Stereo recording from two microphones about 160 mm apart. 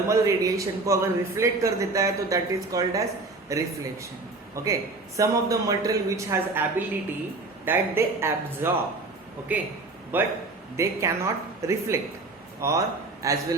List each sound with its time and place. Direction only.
0.1 s speech: 20° right (ahead or behind)